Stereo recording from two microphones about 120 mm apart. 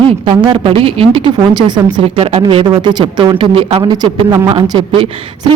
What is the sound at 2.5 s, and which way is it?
Speech, 40° right (ahead or behind).